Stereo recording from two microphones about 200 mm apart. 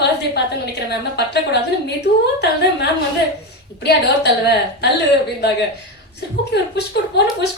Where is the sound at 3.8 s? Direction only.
55° left (ahead or behind).